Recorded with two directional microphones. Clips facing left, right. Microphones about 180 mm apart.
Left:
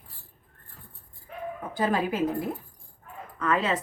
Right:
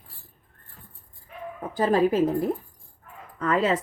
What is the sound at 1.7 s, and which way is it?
Speech, 35° right (ahead or behind).